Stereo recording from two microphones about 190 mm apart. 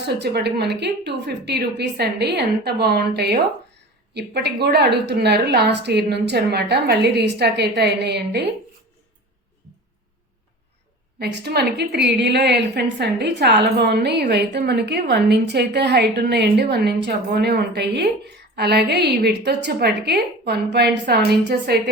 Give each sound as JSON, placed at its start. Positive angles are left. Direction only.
{"t": 0.0, "sound": "a woman's voice", "side_deg": -60}
{"t": 11.2, "sound": "a woman's voice", "side_deg": -60}